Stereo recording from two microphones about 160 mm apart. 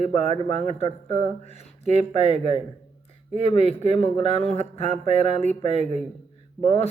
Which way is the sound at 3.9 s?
40° left (ahead or behind).